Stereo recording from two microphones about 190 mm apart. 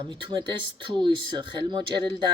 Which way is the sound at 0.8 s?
25° right (ahead or behind).